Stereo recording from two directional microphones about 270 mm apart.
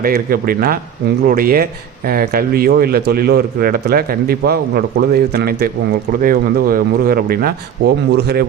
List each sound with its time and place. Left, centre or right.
0.0 s a man's voice: right